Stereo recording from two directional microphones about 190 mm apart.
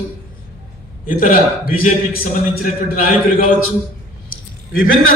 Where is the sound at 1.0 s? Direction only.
45° left (ahead or behind).